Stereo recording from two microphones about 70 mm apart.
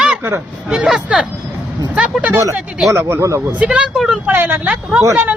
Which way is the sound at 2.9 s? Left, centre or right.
Right.